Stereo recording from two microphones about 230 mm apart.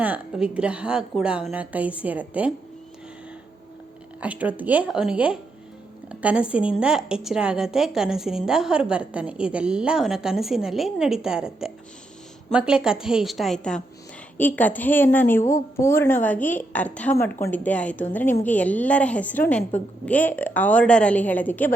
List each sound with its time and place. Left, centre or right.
0.0 s a woman's voice: centre
4.2 s a woman's voice: centre